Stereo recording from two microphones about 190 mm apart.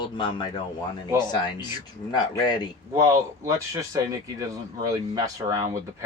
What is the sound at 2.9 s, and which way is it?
Speech, 15° right (ahead or behind).